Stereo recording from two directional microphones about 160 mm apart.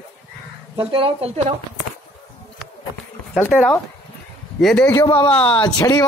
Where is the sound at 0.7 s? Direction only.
35° right (ahead or behind).